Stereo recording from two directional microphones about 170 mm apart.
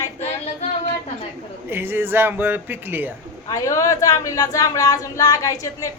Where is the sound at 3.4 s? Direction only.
20° left (ahead or behind).